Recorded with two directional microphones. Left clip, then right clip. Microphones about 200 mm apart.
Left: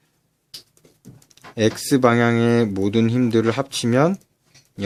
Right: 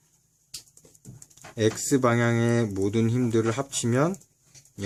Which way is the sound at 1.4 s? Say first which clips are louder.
Left 5 dB; 30° left (ahead or behind).